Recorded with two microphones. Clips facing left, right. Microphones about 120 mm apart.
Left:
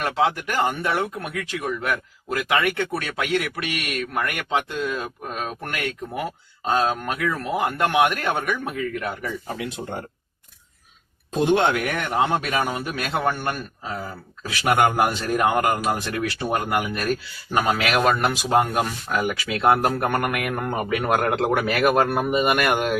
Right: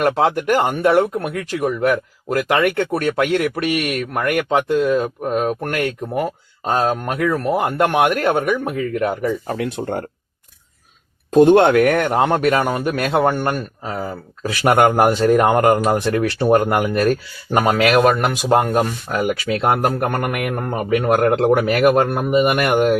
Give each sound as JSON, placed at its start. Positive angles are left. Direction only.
{"t": 0.0, "sound": "speech", "side_deg": -55}
{"t": 8.7, "sound": "a man's voice", "side_deg": -40}
{"t": 9.5, "sound": "speech", "side_deg": -50}
{"t": 11.3, "sound": "a man's voice", "side_deg": -50}
{"t": 14.8, "sound": "a man's voice", "side_deg": -40}
{"t": 15.2, "sound": "a man's voice", "side_deg": -60}
{"t": 15.5, "sound": "a man's voice", "side_deg": -45}
{"t": 16.4, "sound": "speech", "side_deg": -60}
{"t": 20.2, "sound": "a man's voice", "side_deg": -25}